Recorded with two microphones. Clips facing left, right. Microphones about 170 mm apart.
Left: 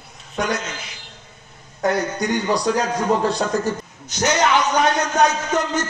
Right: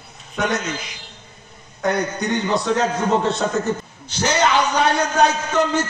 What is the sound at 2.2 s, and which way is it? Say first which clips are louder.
A man's voice: left 3 dB; 20° right (ahead or behind).